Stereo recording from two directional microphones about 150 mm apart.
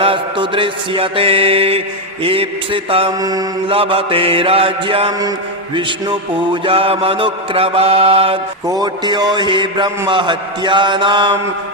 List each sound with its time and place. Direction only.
0.0 s mantra: 35° right (ahead or behind)
3.1 s a man's voice: 25° right (ahead or behind)
3.7 s mantra: 35° right (ahead or behind)
8.6 s a man's voice: 25° right (ahead or behind)
10.1 s mantra: 30° right (ahead or behind)